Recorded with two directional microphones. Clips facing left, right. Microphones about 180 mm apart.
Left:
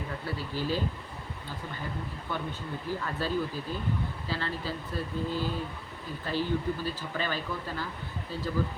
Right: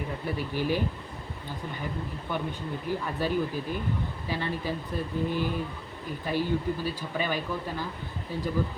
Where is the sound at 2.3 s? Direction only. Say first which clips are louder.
Right 3 dB; 15° right (ahead or behind).